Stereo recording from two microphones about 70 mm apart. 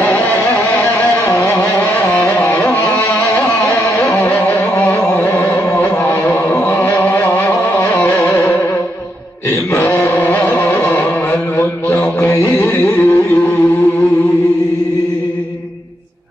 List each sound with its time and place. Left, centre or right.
0.0 s music: left
9.8 s music: left
12.0 s carnatic music: left